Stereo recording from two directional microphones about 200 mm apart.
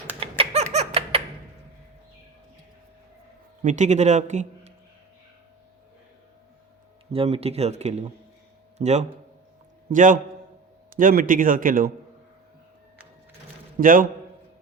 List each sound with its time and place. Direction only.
0.2 s a sound: 30° right (ahead or behind)
3.6 s a man's voice: 35° right (ahead or behind)
7.1 s speech: 30° right (ahead or behind)
13.7 s speech: 45° right (ahead or behind)